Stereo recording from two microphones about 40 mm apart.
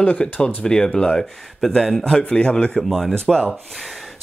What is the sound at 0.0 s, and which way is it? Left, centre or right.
Speech, left.